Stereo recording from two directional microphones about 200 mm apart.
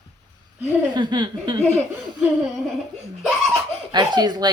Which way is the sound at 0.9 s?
25° right (ahead or behind).